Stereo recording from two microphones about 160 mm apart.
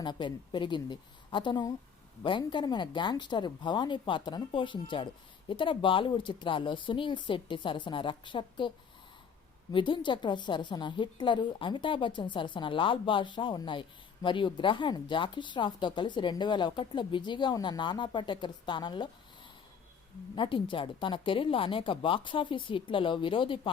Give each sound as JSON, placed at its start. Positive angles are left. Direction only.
{"t": 0.0, "sound": "a woman's voice", "side_deg": 30}
{"t": 9.7, "sound": "a woman's voice", "side_deg": 30}
{"t": 20.3, "sound": "a woman's voice", "side_deg": 30}